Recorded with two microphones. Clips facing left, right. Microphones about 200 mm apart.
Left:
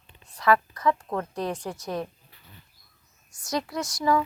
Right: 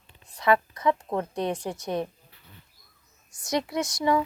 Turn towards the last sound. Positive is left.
turn(degrees=-25)  # may be behind; listen again after turning